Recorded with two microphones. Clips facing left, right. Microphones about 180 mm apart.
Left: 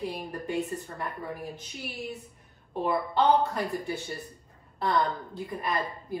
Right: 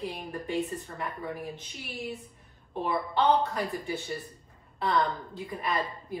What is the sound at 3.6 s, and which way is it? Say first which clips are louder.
Speech: left 1 dB; centre (ahead or behind).